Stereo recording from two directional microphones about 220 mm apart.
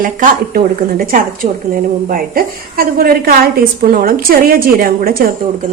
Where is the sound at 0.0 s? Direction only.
40° right (ahead or behind).